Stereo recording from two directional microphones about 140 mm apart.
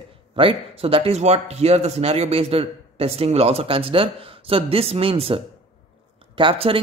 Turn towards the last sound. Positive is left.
turn(degrees=-40)  # may be behind; listen again after turning